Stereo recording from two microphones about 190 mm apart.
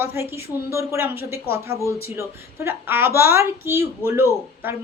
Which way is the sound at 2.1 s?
15° right (ahead or behind).